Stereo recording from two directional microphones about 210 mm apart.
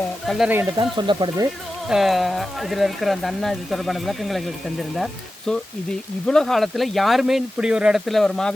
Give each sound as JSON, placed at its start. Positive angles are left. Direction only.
{"t": 0.3, "sound": "speech", "side_deg": -5}
{"t": 0.9, "sound": "speech", "side_deg": -20}
{"t": 1.9, "sound": "speech", "side_deg": 0}
{"t": 6.2, "sound": "speech", "side_deg": 0}